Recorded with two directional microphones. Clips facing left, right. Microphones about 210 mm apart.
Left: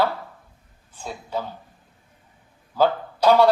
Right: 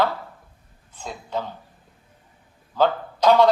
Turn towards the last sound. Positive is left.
turn(degrees=10)  # may be behind; listen again after turning